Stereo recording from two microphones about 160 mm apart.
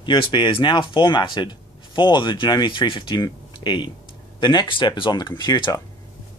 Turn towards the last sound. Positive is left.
turn(degrees=25)  # may be behind; listen again after turning